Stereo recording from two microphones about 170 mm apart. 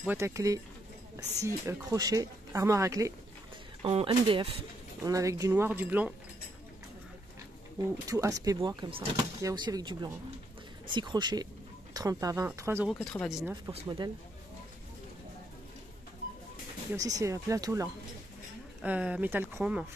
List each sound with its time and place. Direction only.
0.0 s speech: 15° right (ahead or behind)
3.8 s speech: 30° right (ahead or behind)
5.0 s speech: 20° right (ahead or behind)
8.1 s speech: 20° right (ahead or behind)
12.8 s speech: 5° left (ahead or behind)
13.7 s speech: 30° right (ahead or behind)
16.9 s speech: 20° right (ahead or behind)
18.8 s speech: 5° right (ahead or behind)